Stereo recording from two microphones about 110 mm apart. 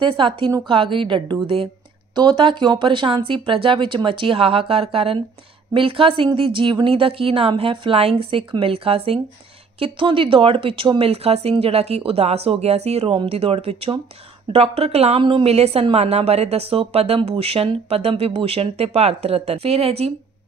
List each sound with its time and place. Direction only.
0.0 s a woman's voice: 50° right (ahead or behind); by 20.1 s 70° right (ahead or behind)